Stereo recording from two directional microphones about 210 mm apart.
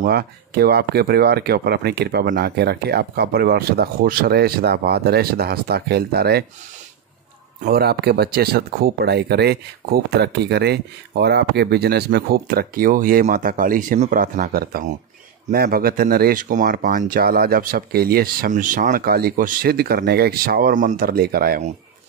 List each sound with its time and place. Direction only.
0.0 s speech: 50° right (ahead or behind)
7.6 s speech: 50° right (ahead or behind)